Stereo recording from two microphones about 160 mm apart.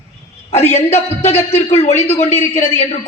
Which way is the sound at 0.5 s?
40° left (ahead or behind).